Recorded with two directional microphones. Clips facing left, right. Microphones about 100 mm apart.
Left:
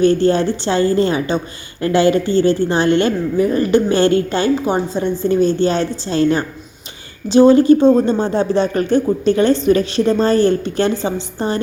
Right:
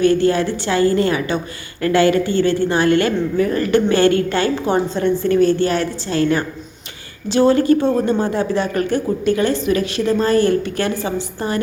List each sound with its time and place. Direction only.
0.0 s a woman's voice: 25° left (ahead or behind)